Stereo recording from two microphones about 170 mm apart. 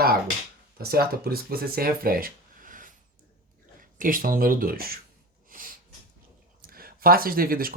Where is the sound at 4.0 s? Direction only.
55° right (ahead or behind).